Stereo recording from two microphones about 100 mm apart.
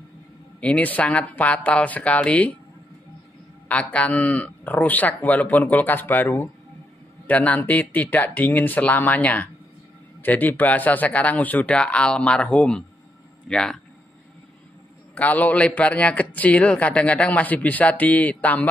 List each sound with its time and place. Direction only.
0.6 s speech: 15° left (ahead or behind)
3.6 s speech: 15° left (ahead or behind)
15.1 s speech: 15° left (ahead or behind)